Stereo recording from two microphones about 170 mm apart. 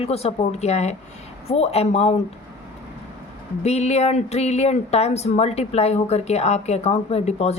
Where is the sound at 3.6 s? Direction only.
40° left (ahead or behind).